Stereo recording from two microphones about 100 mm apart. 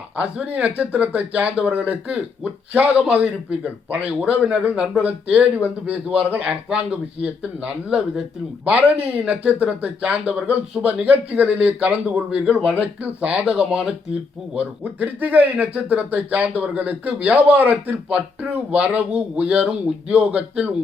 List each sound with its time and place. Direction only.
0.2 s speech: 10° right (ahead or behind)